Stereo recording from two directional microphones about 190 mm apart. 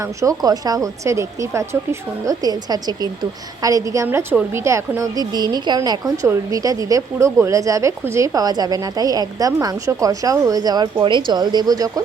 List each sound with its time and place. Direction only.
0.0 s a woman's voice: 15° right (ahead or behind)